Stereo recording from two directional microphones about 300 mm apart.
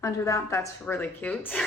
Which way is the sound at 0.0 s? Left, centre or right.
Centre.